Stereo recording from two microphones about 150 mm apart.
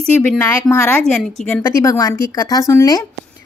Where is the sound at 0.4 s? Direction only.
20° left (ahead or behind).